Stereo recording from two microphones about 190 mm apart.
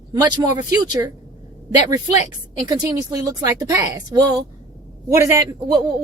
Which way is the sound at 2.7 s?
15° right (ahead or behind).